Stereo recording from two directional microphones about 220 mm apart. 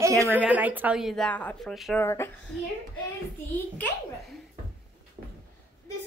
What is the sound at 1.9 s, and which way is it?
Speech, 10° left (ahead or behind).